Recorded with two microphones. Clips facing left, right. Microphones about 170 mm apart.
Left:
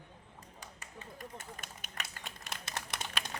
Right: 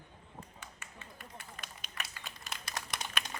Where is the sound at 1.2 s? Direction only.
45° left (ahead or behind).